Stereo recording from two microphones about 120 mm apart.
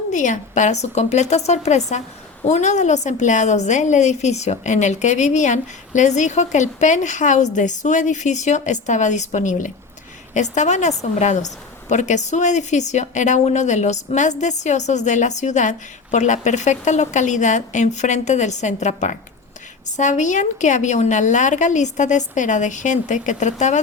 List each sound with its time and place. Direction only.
0.1 s a woman's voice: 90° left